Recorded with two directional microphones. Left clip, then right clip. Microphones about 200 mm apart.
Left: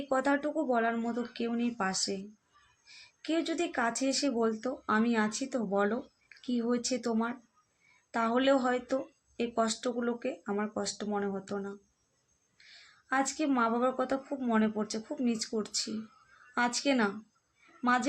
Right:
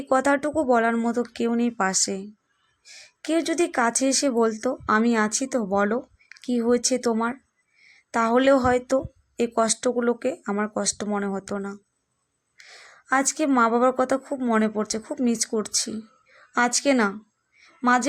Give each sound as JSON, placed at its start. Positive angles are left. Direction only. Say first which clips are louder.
{"t": 0.1, "sound": "speech", "louder": "right 9 dB", "side_deg": -50}